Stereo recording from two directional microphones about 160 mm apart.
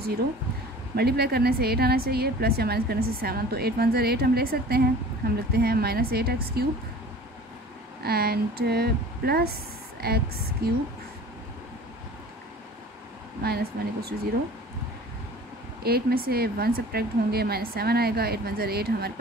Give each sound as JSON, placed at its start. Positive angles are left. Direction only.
{"t": 0.9, "sound": "a woman's voice", "side_deg": -80}
{"t": 8.0, "sound": "a woman's voice", "side_deg": -75}
{"t": 13.4, "sound": "speech", "side_deg": -80}
{"t": 15.8, "sound": "a woman's voice", "side_deg": -75}